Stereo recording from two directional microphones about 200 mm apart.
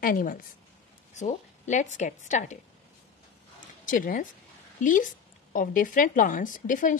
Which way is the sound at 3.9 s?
40° left (ahead or behind).